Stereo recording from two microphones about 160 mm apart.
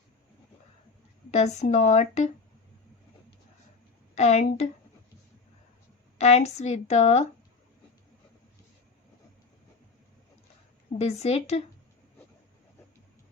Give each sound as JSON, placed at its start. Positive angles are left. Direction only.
{"t": 1.3, "sound": "speech", "side_deg": 45}
{"t": 4.1, "sound": "a woman's voice", "side_deg": 45}
{"t": 6.1, "sound": "speech", "side_deg": 45}
{"t": 10.9, "sound": "a woman's voice", "side_deg": 40}